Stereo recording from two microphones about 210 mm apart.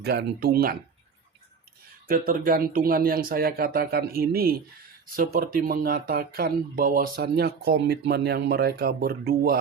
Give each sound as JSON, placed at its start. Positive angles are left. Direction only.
{"t": 0.0, "sound": "speech", "side_deg": -50}
{"t": 2.0, "sound": "speech", "side_deg": -40}